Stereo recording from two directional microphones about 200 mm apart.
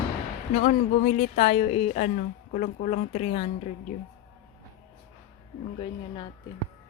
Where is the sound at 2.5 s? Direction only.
35° left (ahead or behind).